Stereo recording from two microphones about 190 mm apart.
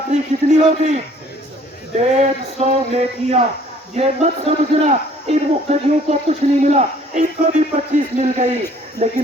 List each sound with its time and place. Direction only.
0.1 s speech: 40° right (ahead or behind)
2.0 s speech: 35° right (ahead or behind)